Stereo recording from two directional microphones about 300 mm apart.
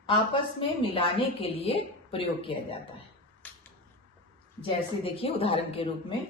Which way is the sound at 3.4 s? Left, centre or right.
Centre.